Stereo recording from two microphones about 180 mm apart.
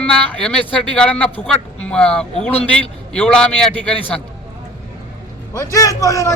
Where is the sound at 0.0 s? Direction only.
5° left (ahead or behind).